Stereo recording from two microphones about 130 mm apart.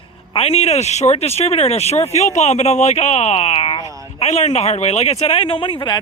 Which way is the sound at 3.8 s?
25° right (ahead or behind).